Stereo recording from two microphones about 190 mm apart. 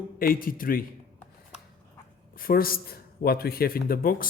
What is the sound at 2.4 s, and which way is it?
Mantra, 50° left (ahead or behind).